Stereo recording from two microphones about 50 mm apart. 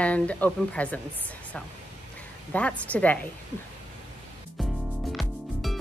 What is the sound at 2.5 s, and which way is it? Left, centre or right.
Speech, left.